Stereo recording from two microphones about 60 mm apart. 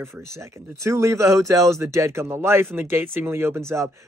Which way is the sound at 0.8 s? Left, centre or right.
Right.